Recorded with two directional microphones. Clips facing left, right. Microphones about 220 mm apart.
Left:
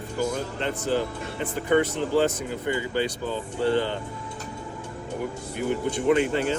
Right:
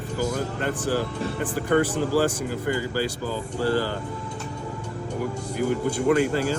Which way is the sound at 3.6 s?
25° left (ahead or behind).